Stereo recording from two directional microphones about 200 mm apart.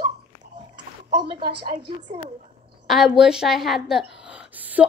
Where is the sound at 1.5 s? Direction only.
45° right (ahead or behind).